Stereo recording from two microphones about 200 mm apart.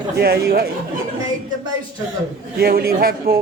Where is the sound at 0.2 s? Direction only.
50° right (ahead or behind).